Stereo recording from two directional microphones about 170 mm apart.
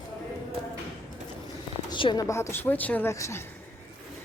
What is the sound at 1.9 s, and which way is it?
Speech, 25° left (ahead or behind).